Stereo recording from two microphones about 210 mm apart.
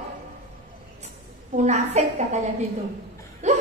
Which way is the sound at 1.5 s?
35° right (ahead or behind).